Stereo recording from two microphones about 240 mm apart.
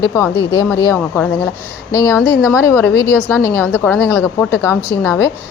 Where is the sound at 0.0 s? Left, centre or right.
Centre.